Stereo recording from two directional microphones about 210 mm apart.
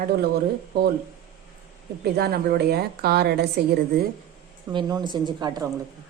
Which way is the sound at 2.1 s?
50° right (ahead or behind).